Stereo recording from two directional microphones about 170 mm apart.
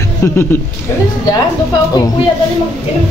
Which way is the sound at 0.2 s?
15° left (ahead or behind).